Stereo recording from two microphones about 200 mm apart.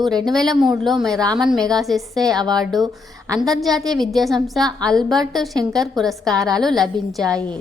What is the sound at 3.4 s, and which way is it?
A woman's voice, centre (ahead or behind).